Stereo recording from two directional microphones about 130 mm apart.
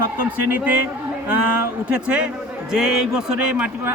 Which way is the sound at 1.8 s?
10° right (ahead or behind).